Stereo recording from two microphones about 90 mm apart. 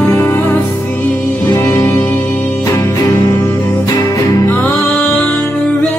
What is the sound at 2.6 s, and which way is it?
Music, 35° left (ahead or behind).